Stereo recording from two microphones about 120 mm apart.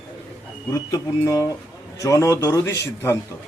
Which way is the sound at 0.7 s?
30° left (ahead or behind).